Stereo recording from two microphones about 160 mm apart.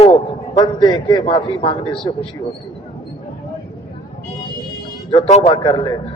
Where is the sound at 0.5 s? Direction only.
25° left (ahead or behind).